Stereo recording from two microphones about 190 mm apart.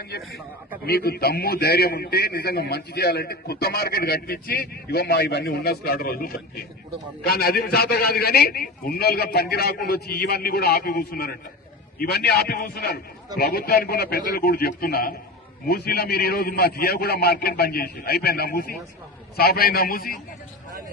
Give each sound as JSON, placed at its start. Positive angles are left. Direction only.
{"t": 0.1, "sound": "a man's voice", "side_deg": 60}